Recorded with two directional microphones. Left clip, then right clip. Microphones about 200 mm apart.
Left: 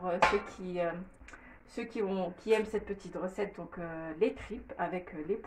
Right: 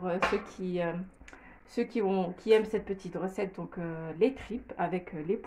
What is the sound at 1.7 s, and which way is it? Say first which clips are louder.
Speech: right 5 dB; 55° right (ahead or behind).